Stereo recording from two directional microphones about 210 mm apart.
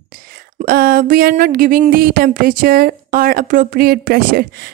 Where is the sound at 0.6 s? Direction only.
45° right (ahead or behind).